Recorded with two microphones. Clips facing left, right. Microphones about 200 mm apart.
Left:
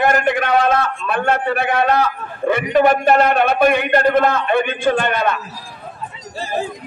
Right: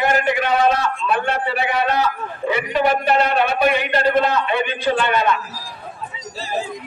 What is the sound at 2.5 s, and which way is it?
A man's voice, 50° left (ahead or behind).